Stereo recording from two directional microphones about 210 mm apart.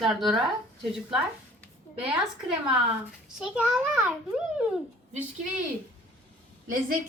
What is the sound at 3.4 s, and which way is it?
Child singing, 5° right (ahead or behind).